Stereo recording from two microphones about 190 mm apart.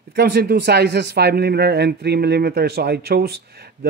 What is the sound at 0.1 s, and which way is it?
A man's voice, 55° right (ahead or behind).